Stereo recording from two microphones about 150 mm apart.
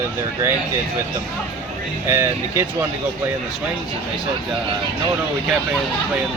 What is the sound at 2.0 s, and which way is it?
Speech, 20° right (ahead or behind).